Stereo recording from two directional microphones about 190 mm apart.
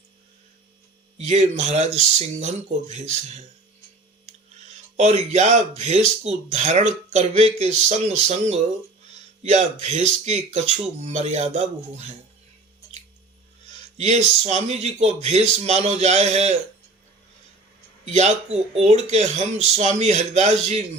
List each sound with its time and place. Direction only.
1.2 s speech: 35° right (ahead or behind)
4.9 s speech: 35° right (ahead or behind)
14.0 s speech: 35° right (ahead or behind)
18.0 s speech: 35° right (ahead or behind)